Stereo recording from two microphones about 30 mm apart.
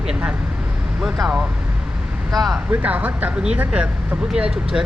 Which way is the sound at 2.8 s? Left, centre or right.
Right.